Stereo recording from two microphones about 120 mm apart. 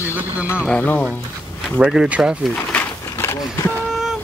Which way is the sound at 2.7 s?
20° left (ahead or behind).